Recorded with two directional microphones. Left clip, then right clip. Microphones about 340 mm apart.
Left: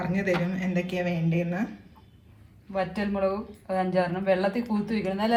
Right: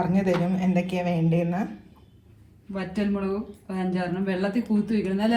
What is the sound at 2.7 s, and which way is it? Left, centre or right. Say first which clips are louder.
Speech: left 2 dB; left.